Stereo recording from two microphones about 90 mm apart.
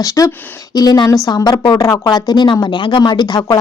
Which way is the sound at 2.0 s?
50° left (ahead or behind).